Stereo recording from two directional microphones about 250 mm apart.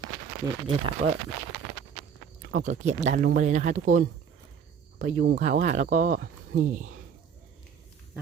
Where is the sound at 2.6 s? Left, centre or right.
Right.